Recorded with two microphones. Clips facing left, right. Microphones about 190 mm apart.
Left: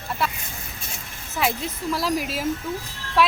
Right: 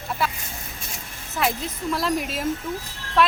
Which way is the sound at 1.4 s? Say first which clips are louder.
Even; centre (ahead or behind).